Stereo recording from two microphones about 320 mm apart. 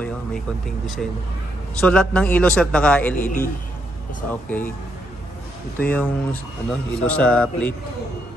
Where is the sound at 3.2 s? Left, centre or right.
Left.